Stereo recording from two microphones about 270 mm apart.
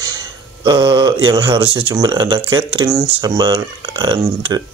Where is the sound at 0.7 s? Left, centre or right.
Centre.